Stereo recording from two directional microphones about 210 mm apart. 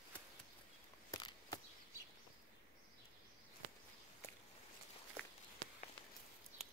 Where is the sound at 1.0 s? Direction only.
20° left (ahead or behind).